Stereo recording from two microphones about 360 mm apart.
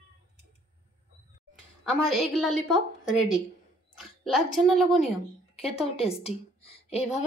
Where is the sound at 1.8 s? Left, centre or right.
Centre.